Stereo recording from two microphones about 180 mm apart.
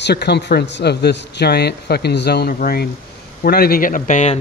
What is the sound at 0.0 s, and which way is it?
Speech, 65° left (ahead or behind).